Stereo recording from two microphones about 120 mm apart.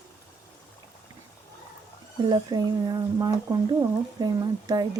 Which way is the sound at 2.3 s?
35° right (ahead or behind).